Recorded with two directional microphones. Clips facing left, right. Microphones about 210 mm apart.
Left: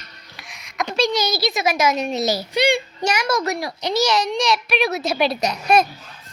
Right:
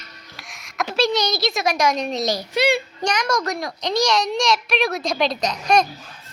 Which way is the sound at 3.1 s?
5° left (ahead or behind).